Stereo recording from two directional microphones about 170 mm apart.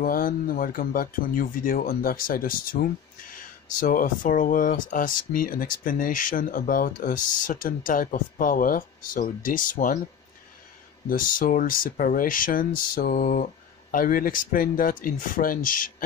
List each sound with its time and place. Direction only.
0.0 s speech: 55° left (ahead or behind)
11.1 s speech: 55° left (ahead or behind)